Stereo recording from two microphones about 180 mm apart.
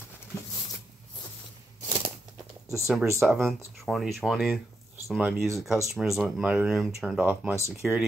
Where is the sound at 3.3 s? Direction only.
Centre (ahead or behind).